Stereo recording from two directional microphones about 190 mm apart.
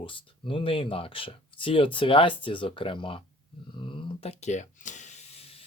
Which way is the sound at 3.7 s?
25° left (ahead or behind).